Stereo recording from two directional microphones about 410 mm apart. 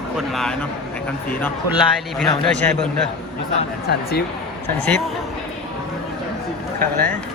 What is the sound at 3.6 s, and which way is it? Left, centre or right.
Speech, left.